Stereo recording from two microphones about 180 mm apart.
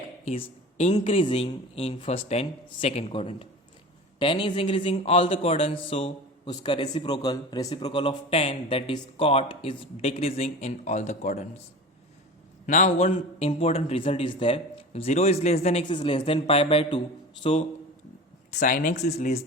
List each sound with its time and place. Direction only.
0.9 s a man's voice: 30° left (ahead or behind)
7.2 s a man's voice: 20° left (ahead or behind); by 11.4 s 40° left (ahead or behind)
12.6 s a man's voice: 45° left (ahead or behind)
18.6 s a man's voice: 50° left (ahead or behind)